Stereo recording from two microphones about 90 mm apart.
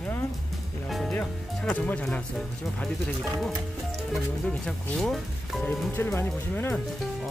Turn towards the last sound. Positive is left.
turn(degrees=20)  # may be behind; listen again after turning